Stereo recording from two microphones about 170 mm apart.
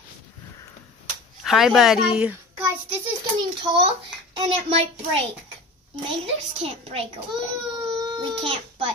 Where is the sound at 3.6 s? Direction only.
30° right (ahead or behind).